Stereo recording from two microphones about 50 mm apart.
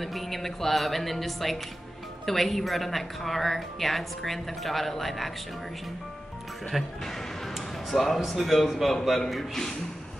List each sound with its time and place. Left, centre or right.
0.0 s speech: centre
6.7 s speech: centre